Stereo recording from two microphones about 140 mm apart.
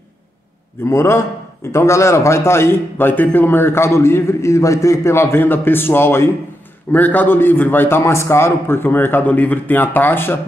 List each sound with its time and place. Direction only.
0.8 s a man's voice: 20° left (ahead or behind)